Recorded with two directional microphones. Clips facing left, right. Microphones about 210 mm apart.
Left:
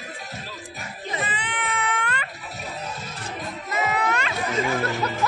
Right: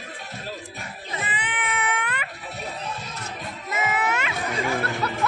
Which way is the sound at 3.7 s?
5° right (ahead or behind).